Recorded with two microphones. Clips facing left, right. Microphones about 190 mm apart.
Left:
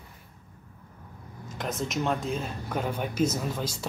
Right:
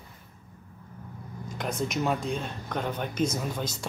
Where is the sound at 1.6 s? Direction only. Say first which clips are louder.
Right 1 dB; centre (ahead or behind).